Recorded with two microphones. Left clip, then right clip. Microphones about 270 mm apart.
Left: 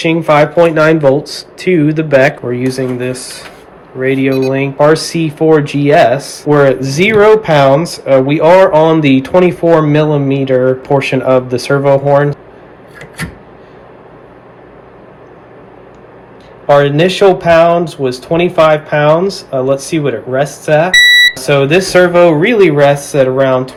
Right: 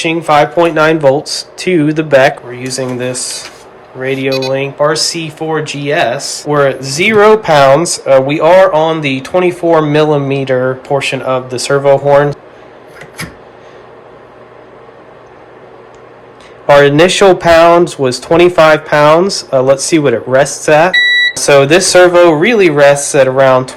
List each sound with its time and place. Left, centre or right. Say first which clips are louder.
0.0 s speech: even; centre
16.6 s speech: right 3 dB; right